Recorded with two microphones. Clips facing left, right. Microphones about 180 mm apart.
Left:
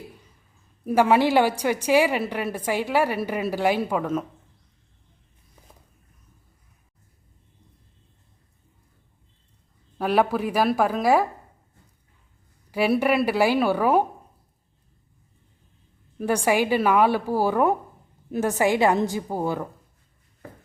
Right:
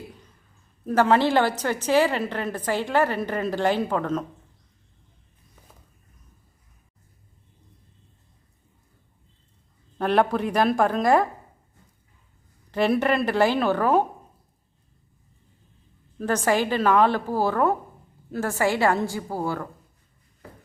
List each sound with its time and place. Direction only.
0.9 s a woman's voice: 10° left (ahead or behind)
10.0 s a woman's voice: 5° left (ahead or behind)
12.7 s a woman's voice: 10° left (ahead or behind)
16.1 s a woman's voice: 10° left (ahead or behind)